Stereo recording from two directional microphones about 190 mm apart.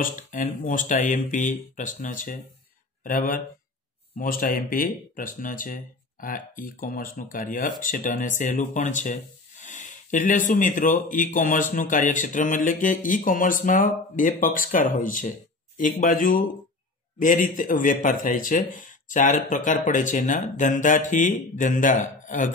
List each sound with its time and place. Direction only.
0.0 s speech: 45° left (ahead or behind)